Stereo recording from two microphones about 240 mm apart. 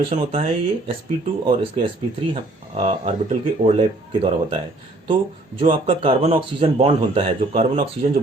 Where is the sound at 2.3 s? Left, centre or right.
Right.